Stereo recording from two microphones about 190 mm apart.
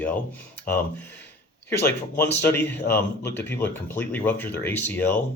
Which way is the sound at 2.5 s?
10° left (ahead or behind).